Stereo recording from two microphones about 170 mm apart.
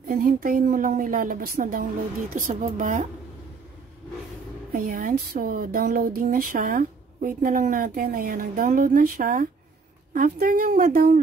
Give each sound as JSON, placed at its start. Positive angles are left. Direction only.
{"t": 0.1, "sound": "a woman's voice", "side_deg": -55}
{"t": 4.7, "sound": "speech", "side_deg": -55}